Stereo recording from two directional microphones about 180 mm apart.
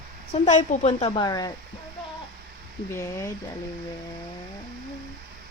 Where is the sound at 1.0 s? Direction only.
25° left (ahead or behind).